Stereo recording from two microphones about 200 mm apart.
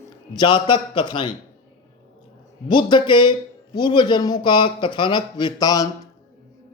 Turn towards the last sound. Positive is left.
turn(degrees=20)  # may be behind; listen again after turning